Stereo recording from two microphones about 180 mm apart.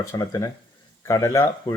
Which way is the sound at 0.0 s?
20° left (ahead or behind).